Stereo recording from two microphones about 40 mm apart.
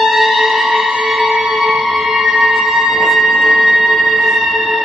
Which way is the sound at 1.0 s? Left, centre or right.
Centre.